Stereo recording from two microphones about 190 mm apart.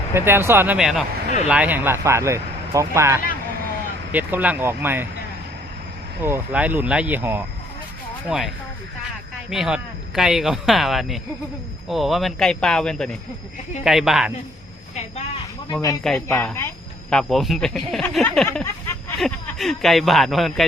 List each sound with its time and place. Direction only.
0.1 s speech: 10° right (ahead or behind)
6.2 s speech: 10° right (ahead or behind)
15.7 s speech: 20° left (ahead or behind)
18.4 s a sound: 10° left (ahead or behind)
19.2 s speech: centre (ahead or behind)